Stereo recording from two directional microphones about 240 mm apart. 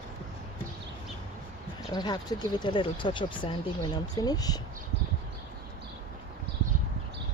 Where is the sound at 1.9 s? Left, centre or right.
Centre.